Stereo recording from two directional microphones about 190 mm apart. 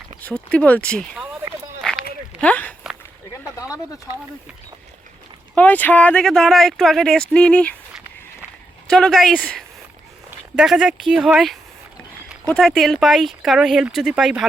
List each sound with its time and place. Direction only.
0.2 s speech: 5° left (ahead or behind)
2.4 s speech: 5° left (ahead or behind)
3.3 s a sound: 15° left (ahead or behind)
5.5 s speech: 10° left (ahead or behind)
8.9 s speech: centre (ahead or behind)